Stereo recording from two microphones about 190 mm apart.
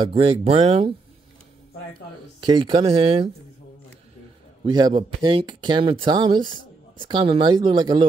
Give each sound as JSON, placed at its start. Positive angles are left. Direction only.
{"t": 0.0, "sound": "speech", "side_deg": -30}
{"t": 2.4, "sound": "speech", "side_deg": -25}
{"t": 4.6, "sound": "speech", "side_deg": -20}